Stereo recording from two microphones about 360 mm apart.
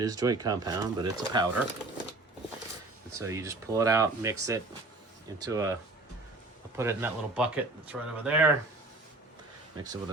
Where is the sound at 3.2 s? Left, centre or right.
Centre.